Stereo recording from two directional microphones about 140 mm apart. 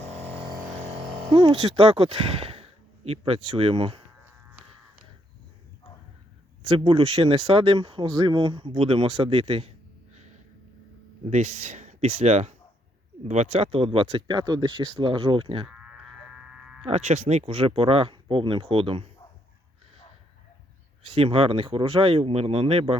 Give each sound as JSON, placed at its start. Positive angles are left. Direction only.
{"t": 1.3, "sound": "speech", "side_deg": -40}
{"t": 6.6, "sound": "speech", "side_deg": -40}
{"t": 11.3, "sound": "speech", "side_deg": -55}
{"t": 15.6, "sound": "electric shaver", "side_deg": -5}
{"t": 16.8, "sound": "speech", "side_deg": -50}
{"t": 21.0, "sound": "speech", "side_deg": -45}